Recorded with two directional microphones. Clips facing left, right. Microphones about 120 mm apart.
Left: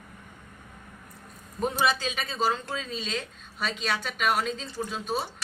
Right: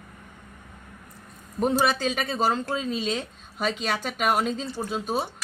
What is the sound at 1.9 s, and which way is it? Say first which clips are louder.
Speech: right 5 dB; 50° right (ahead or behind).